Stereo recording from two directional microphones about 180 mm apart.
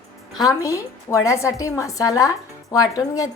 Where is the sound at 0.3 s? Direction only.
20° left (ahead or behind).